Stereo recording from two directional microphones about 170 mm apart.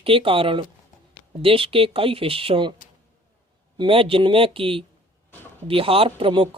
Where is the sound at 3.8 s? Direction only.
30° right (ahead or behind).